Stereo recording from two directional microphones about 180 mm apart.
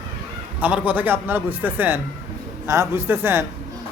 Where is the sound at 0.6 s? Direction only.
10° right (ahead or behind).